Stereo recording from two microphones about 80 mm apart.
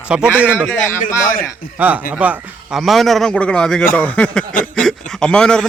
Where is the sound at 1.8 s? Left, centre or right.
Centre.